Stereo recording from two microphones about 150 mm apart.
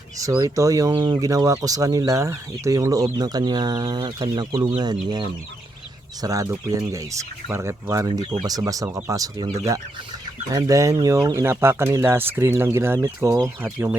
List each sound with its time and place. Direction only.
0.2 s speech: 20° right (ahead or behind)
8.0 s speech: 30° right (ahead or behind)
10.5 s speech: 25° right (ahead or behind)